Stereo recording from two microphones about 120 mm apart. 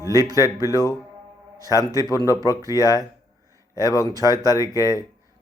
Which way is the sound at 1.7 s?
30° left (ahead or behind).